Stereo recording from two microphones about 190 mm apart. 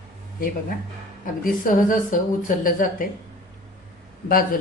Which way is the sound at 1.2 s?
45° left (ahead or behind).